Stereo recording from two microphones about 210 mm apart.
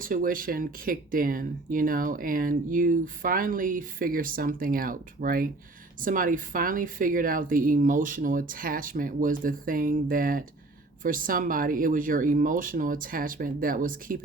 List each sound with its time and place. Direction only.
0.0 s speech: 40° right (ahead or behind)